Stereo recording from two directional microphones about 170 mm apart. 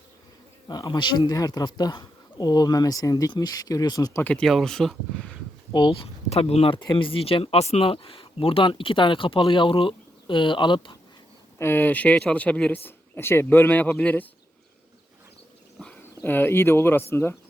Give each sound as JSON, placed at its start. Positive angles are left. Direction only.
{"t": 0.7, "sound": "speech", "side_deg": 25}
{"t": 4.2, "sound": "speech", "side_deg": 5}
{"t": 5.7, "sound": "speech", "side_deg": 25}
{"t": 11.5, "sound": "speech", "side_deg": 15}
{"t": 15.8, "sound": "speech", "side_deg": 10}